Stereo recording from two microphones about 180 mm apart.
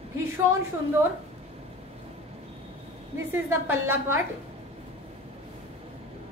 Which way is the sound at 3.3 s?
15° right (ahead or behind).